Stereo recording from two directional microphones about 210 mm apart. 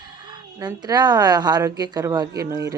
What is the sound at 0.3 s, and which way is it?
A woman's voice, 20° right (ahead or behind).